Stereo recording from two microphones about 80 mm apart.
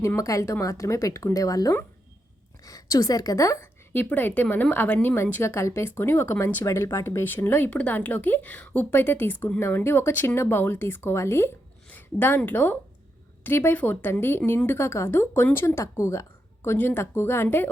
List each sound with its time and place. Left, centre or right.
0.2 s speech: left
3.9 s a woman's voice: left
11.9 s a sound: left
12.4 s a woman's voice: left
16.6 s a woman's voice: left